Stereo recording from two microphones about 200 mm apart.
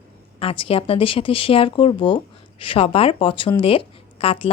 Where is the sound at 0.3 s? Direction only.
25° left (ahead or behind).